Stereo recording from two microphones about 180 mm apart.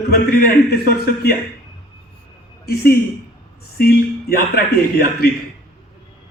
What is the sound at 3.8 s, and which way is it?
A man's voice, 60° left (ahead or behind).